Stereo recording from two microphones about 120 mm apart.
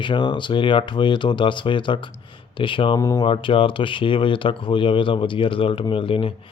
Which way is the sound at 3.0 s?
25° left (ahead or behind).